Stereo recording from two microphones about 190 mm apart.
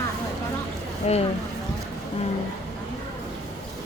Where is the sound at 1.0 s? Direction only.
35° left (ahead or behind).